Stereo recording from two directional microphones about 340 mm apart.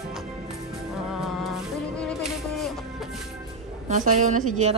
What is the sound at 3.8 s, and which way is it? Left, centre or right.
Speech, right.